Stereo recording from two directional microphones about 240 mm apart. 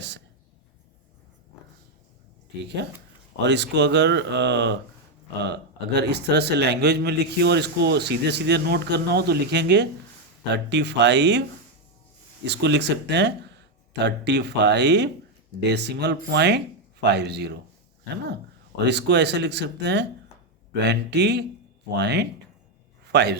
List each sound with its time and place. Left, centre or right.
3.4 s a man's voice: right
12.5 s a man's voice: right
18.9 s a man's voice: right